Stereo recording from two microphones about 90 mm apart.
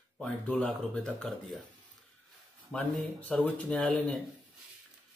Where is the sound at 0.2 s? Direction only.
15° left (ahead or behind).